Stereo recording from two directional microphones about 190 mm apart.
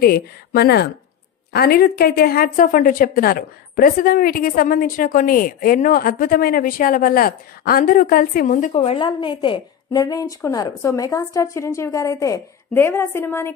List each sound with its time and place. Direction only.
0.0 s a woman's voice: 55° left (ahead or behind); by 13.5 s 10° left (ahead or behind)